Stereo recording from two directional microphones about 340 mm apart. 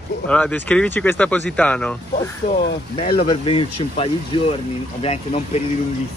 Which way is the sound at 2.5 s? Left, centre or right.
Left.